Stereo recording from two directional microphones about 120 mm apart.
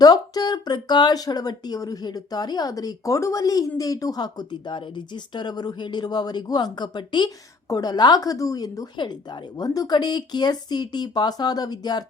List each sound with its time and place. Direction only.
0.0 s a woman's voice: 35° left (ahead or behind)